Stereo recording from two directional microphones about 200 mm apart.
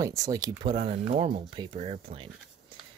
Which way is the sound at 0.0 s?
15° right (ahead or behind).